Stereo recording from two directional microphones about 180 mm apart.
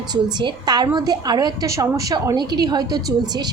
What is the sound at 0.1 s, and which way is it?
A woman's voice, 25° right (ahead or behind).